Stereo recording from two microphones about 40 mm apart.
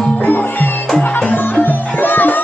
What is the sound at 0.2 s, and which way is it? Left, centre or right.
Music, left.